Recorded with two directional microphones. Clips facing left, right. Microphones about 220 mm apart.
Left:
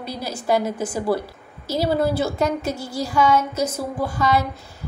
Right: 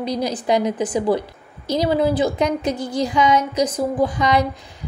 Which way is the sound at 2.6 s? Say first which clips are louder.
Right 4 dB; 20° right (ahead or behind).